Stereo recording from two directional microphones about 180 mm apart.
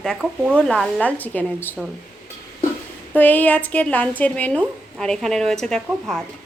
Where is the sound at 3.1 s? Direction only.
10° left (ahead or behind).